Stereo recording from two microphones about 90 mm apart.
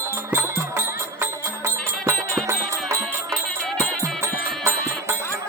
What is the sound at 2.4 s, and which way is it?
Music, 30° right (ahead or behind).